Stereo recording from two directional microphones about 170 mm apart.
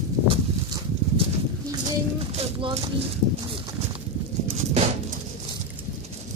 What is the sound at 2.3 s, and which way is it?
Speech, 30° right (ahead or behind).